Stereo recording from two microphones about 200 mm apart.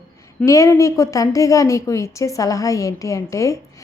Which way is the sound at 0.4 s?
15° left (ahead or behind).